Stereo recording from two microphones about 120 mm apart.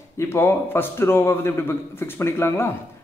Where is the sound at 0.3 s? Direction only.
20° left (ahead or behind).